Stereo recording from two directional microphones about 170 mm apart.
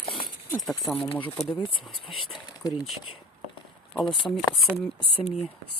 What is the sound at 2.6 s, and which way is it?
Speech, 20° left (ahead or behind).